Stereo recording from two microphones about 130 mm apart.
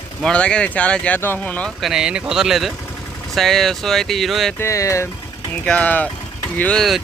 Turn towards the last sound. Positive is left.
turn(degrees=5)  # may be behind; listen again after turning